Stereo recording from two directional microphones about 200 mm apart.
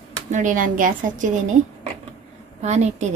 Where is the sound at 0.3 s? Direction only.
40° right (ahead or behind).